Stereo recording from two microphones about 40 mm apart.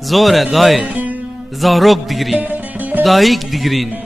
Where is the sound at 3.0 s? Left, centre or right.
Centre.